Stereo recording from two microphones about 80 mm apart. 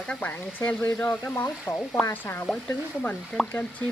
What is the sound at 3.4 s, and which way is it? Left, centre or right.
Speech, centre.